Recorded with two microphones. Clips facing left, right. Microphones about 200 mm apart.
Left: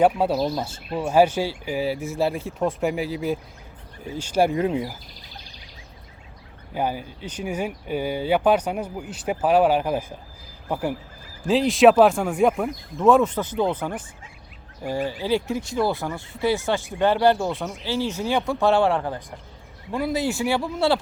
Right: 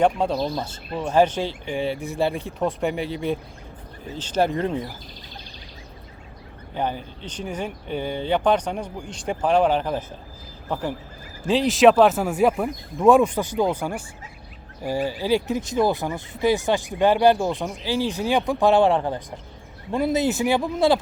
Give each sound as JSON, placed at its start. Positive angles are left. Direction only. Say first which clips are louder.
{"t": 0.0, "sound": "speech", "louder": "left 1 dB", "side_deg": 5}
{"t": 6.7, "sound": "speech", "louder": "left 1 dB", "side_deg": 10}